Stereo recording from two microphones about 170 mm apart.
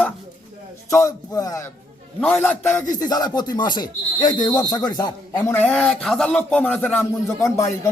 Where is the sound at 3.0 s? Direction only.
25° left (ahead or behind).